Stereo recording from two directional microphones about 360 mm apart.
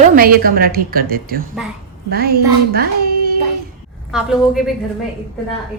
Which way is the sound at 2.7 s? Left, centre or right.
Right.